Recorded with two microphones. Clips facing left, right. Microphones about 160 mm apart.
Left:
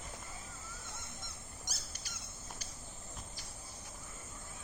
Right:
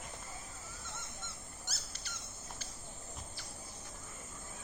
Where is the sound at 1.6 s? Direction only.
10° left (ahead or behind).